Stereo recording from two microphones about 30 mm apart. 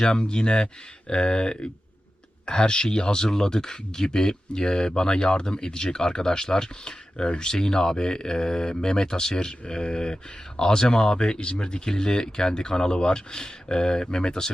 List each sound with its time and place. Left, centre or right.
0.0 s speech: left